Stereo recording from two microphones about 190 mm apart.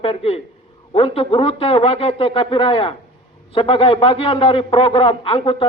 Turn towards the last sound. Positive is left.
turn(degrees=30)  # may be behind; listen again after turning